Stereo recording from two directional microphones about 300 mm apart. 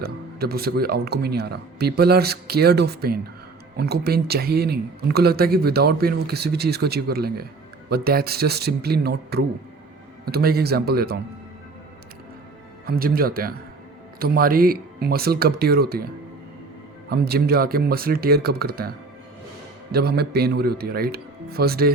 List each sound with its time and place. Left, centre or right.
0.0 s speech: right
12.8 s speech: right
17.1 s speech: right
19.9 s speech: right